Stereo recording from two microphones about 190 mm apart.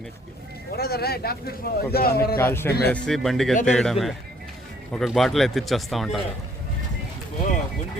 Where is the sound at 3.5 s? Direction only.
40° left (ahead or behind).